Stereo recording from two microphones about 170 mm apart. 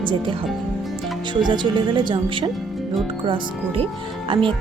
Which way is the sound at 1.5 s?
25° right (ahead or behind).